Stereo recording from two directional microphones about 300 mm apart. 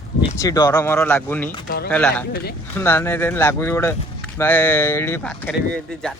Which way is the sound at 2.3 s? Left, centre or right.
Left.